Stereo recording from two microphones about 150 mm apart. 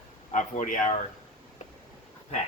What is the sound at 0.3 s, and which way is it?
Speech, 60° left (ahead or behind).